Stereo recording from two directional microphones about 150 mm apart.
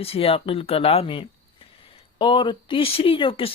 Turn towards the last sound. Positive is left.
turn(degrees=35)  # may be behind; listen again after turning